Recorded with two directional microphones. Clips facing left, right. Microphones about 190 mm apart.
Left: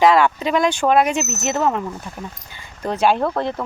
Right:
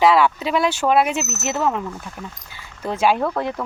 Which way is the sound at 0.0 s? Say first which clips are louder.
Left 1 dB; 5° right (ahead or behind).